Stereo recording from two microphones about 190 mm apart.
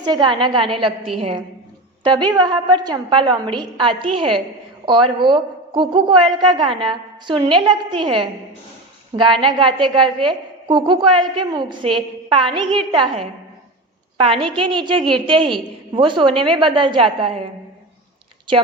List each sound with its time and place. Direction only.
0.0 s a woman's voice: 25° right (ahead or behind)
2.0 s a woman's voice: 25° right (ahead or behind)